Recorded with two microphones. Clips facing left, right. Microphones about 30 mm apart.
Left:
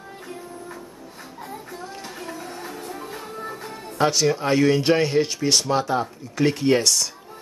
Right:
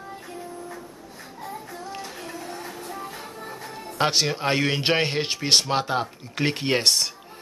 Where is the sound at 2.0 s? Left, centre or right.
Centre.